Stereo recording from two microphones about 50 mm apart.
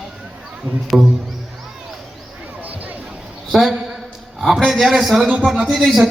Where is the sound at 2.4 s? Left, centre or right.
Right.